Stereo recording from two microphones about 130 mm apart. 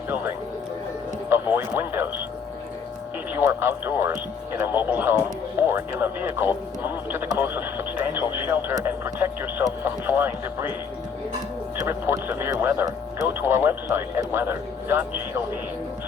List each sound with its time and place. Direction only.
1.3 s radio: 15° right (ahead or behind)
3.3 s speech: 15° right (ahead or behind)
11.8 s speech: 20° right (ahead or behind)